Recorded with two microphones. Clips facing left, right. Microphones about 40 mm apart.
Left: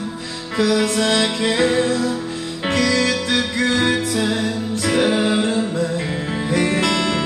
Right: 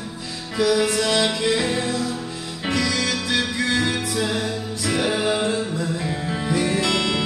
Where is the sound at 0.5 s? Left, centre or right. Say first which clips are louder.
Left 2 dB; left.